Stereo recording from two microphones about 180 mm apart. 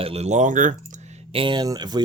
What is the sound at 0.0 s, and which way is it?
Speech, 35° right (ahead or behind).